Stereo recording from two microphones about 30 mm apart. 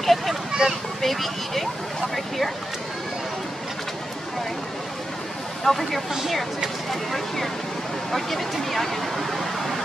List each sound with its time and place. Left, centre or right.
0.0 s speech: centre
0.5 s a sound: centre
1.0 s speech: centre
5.6 s speech: centre